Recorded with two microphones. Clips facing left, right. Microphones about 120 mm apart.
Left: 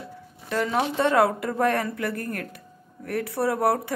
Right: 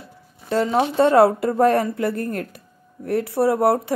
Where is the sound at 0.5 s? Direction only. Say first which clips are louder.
Right 5 dB; 30° right (ahead or behind).